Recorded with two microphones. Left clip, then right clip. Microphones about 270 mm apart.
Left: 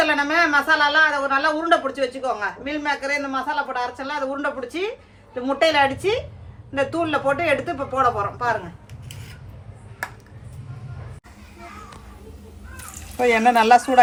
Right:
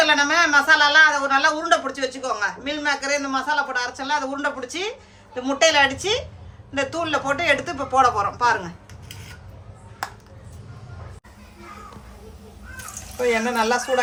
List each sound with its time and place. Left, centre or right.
0.0 s speech: centre
13.2 s speech: left